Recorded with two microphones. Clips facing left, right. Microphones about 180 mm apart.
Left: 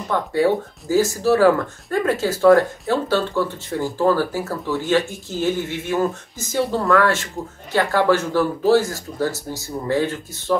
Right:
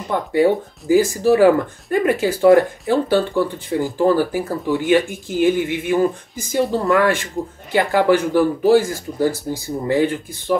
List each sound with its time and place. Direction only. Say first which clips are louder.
0.1 s speech: right 2 dB; 15° right (ahead or behind)